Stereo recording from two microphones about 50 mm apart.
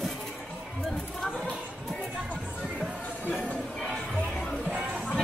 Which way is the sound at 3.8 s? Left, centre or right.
Centre.